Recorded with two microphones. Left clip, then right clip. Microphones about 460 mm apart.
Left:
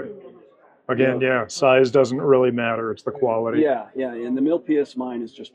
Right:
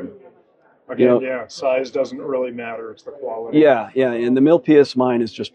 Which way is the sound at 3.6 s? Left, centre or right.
Right.